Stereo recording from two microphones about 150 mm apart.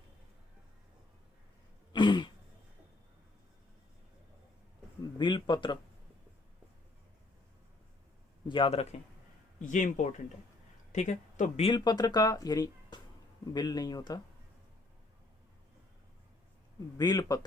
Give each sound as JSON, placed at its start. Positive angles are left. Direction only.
{"t": 1.9, "sound": "throat clearing", "side_deg": 30}
{"t": 5.1, "sound": "a man's voice", "side_deg": 30}
{"t": 8.4, "sound": "a man's voice", "side_deg": 35}
{"t": 9.6, "sound": "speech", "side_deg": 55}
{"t": 11.6, "sound": "speech", "side_deg": 30}
{"t": 17.0, "sound": "speech", "side_deg": 25}